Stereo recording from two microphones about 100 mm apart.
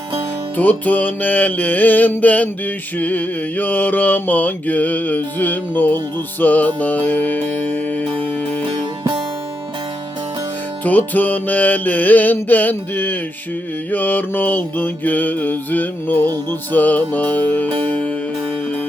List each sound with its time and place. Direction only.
0.5 s music: 15° left (ahead or behind)
10.8 s music: 15° left (ahead or behind)